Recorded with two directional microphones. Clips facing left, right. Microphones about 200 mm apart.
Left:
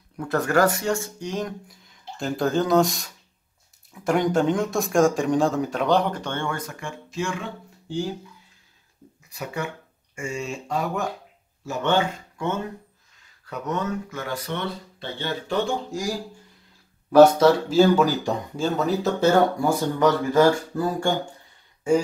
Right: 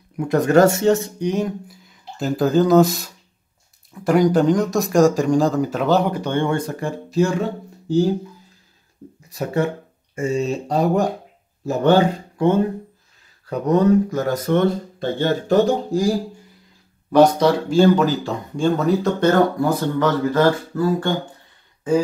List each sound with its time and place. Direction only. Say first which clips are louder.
0.2 s speech: right 6 dB; 15° right (ahead or behind)
6.5 s speech: right 9 dB; 30° right (ahead or behind)
9.3 s speech: right 9 dB; 35° right (ahead or behind)
17.1 s speech: even; 5° left (ahead or behind)